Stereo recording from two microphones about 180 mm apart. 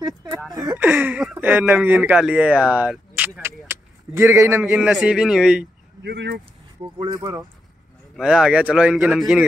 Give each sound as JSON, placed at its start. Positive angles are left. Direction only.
{"t": 0.5, "sound": "speech", "side_deg": -20}
{"t": 0.7, "sound": "speech", "side_deg": -10}
{"t": 3.4, "sound": "a sound", "side_deg": -15}
{"t": 4.7, "sound": "speech", "side_deg": 0}
{"t": 6.0, "sound": "speech", "side_deg": -65}
{"t": 6.8, "sound": "speech", "side_deg": -25}
{"t": 8.2, "sound": "speech", "side_deg": -5}